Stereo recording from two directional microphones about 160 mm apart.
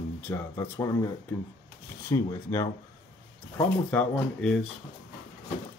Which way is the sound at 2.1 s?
20° left (ahead or behind).